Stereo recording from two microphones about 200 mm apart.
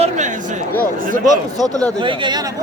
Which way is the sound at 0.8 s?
40° left (ahead or behind).